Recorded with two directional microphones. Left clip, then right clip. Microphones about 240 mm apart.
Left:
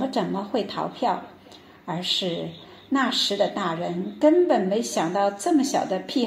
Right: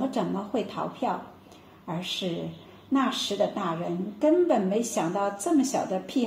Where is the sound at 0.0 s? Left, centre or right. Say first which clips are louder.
Left 3 dB; left.